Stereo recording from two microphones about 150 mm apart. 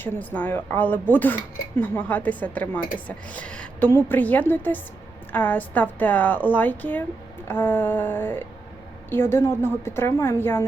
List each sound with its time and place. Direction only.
0.0 s speech: 10° left (ahead or behind)